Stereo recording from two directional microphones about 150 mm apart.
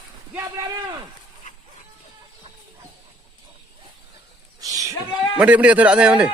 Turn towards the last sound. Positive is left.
turn(degrees=-5)  # may be behind; listen again after turning